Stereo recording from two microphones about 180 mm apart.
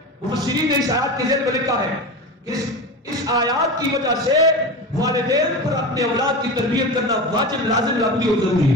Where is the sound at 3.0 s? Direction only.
20° right (ahead or behind).